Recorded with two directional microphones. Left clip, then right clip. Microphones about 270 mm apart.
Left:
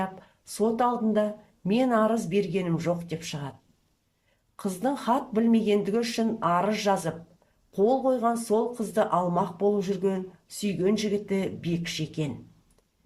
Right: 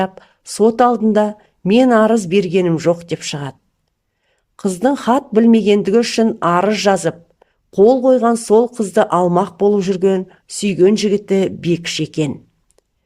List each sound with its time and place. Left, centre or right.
0.0 s speech: right
4.5 s speech: right